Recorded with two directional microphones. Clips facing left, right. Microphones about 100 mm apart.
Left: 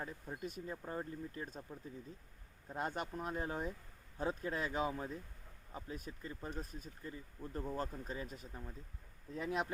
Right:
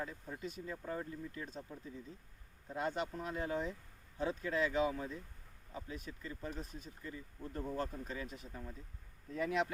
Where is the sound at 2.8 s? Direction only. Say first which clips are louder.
Right 2 dB; 45° left (ahead or behind).